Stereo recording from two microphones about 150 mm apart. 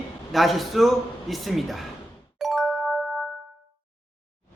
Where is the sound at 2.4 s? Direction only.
Centre (ahead or behind).